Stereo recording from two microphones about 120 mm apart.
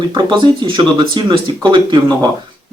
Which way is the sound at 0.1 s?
40° right (ahead or behind).